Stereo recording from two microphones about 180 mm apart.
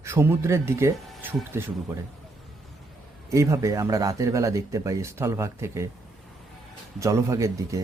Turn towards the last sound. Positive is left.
turn(degrees=-15)  # may be behind; listen again after turning